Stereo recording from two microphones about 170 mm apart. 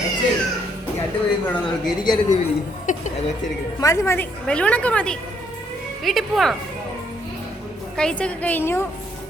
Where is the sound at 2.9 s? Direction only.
50° left (ahead or behind).